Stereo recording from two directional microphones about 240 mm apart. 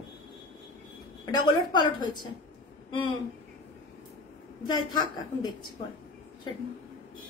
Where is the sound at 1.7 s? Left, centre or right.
Centre.